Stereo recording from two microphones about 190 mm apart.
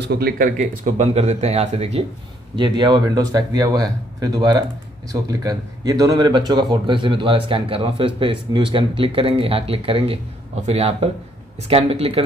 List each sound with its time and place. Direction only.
0.0 s speech: 60° right (ahead or behind); by 12.2 s 30° right (ahead or behind)